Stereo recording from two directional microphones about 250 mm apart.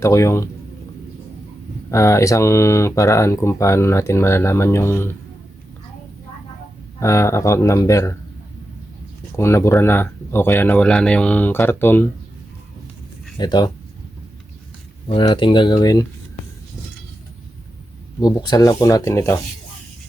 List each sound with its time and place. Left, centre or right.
0.0 s speech: centre
1.9 s speech: centre
7.0 s speech: centre
9.3 s speech: centre
13.4 s speech: centre
15.1 s speech: centre
18.2 s speech: centre